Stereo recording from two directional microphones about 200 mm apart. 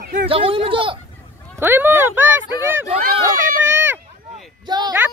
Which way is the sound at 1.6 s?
10° right (ahead or behind).